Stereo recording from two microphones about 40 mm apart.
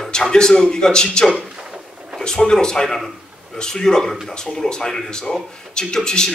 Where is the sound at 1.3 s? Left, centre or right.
Centre.